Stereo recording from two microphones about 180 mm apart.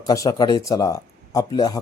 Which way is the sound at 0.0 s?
20° left (ahead or behind).